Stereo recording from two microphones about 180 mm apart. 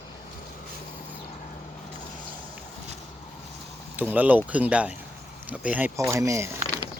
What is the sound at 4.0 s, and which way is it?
Speech, 10° right (ahead or behind).